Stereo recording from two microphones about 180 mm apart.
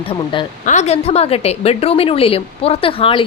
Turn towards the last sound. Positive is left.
turn(degrees=30)  # may be behind; listen again after turning